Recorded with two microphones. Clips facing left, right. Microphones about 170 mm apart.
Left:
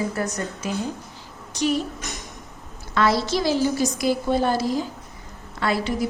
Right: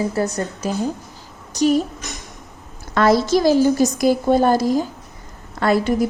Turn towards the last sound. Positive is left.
turn(degrees=-45)  # may be behind; listen again after turning